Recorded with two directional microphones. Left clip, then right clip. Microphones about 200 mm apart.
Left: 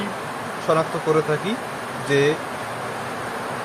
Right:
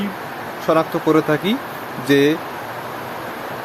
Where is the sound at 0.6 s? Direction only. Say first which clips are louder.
Right 4 dB; 40° right (ahead or behind).